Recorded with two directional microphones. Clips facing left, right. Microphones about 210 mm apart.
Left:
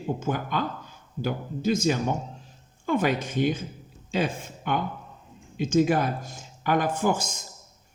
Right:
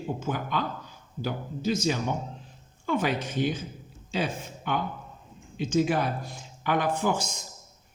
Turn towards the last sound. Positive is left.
turn(degrees=45)  # may be behind; listen again after turning